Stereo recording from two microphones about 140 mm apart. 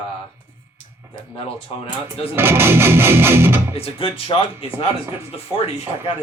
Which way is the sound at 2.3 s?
15° right (ahead or behind).